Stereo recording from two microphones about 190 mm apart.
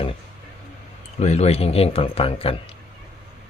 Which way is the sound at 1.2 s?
35° left (ahead or behind).